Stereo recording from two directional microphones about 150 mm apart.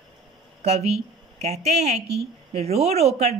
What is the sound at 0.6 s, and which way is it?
A woman's voice, 45° right (ahead or behind).